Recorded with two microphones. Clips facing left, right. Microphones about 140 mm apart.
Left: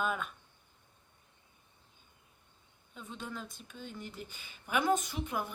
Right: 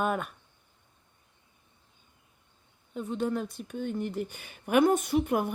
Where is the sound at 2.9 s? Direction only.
60° right (ahead or behind).